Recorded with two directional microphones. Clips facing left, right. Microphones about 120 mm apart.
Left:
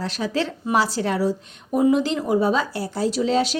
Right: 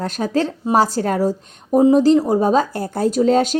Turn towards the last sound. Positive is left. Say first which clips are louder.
# right 5 dB
turn(degrees=-45)  # may be behind; listen again after turning